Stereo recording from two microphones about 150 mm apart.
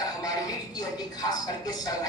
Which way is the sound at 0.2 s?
25° left (ahead or behind).